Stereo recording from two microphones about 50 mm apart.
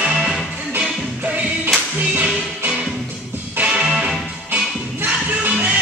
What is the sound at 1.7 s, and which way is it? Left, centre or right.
Music, right.